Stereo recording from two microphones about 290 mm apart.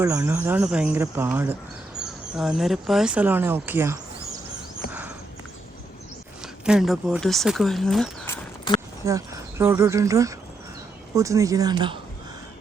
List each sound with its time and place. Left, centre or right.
0.0 s speech: centre
4.9 s horse: centre
6.7 s speech: centre
8.7 s a sound: centre
9.0 s speech: centre